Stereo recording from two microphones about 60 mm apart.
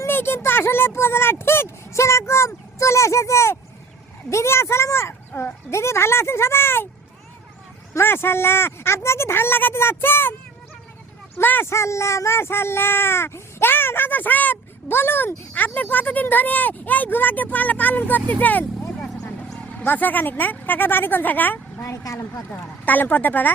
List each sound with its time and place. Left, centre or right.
0.1 s speech: left
8.0 s speech: left
11.3 s speech: left
11.7 s speech: left
18.9 s vehicle: centre
19.5 s speech: left
21.9 s speech: left
22.5 s speech: left